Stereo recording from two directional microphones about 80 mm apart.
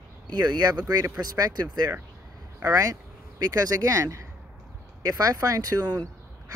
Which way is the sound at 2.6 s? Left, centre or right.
Right.